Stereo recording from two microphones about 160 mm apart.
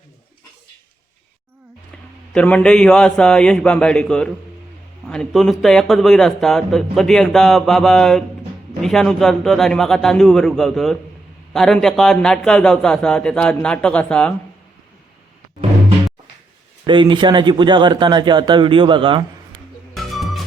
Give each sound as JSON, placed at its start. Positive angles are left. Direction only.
{"t": 2.3, "sound": "speech", "side_deg": 10}
{"t": 16.8, "sound": "speech", "side_deg": -30}
{"t": 20.0, "sound": "music", "side_deg": 0}